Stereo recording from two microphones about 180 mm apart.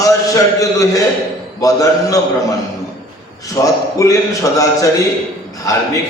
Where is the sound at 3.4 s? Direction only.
20° left (ahead or behind).